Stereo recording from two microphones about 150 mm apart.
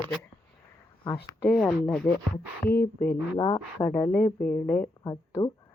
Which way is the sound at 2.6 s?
15° left (ahead or behind).